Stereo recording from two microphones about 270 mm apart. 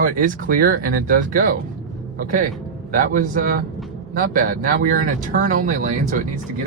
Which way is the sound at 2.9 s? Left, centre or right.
Right.